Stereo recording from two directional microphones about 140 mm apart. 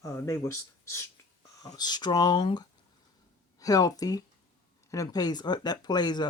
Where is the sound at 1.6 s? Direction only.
30° left (ahead or behind).